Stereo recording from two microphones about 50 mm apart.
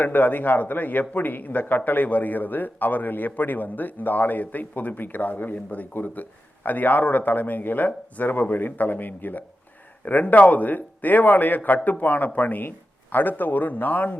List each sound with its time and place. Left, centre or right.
0.0 s speech: left